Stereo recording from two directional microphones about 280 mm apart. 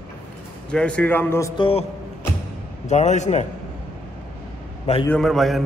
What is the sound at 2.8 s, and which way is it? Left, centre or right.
Speech, left.